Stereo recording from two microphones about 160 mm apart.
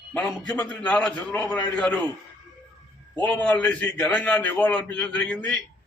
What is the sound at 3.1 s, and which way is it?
A man's voice, 10° left (ahead or behind).